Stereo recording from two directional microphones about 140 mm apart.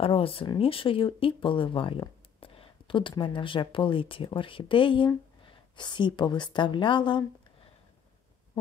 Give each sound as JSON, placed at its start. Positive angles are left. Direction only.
{"t": 0.0, "sound": "speech", "side_deg": 40}